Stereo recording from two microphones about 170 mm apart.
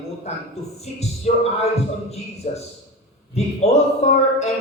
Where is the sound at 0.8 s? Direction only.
40° left (ahead or behind).